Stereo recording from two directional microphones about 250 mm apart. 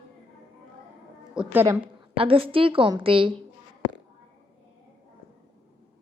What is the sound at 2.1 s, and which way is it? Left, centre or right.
A woman's voice, right.